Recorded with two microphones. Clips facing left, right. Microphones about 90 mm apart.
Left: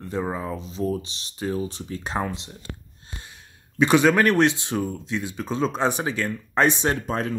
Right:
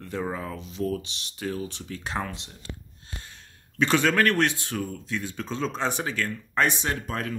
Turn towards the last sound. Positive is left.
turn(degrees=25)  # may be behind; listen again after turning